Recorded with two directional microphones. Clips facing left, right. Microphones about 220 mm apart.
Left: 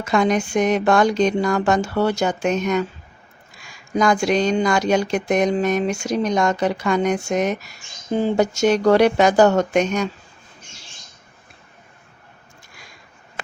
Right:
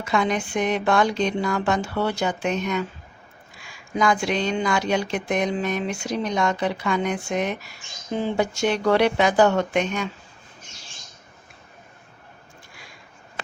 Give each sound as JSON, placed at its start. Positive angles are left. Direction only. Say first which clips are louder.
{"t": 0.0, "sound": "speech", "louder": "left 5 dB", "side_deg": 45}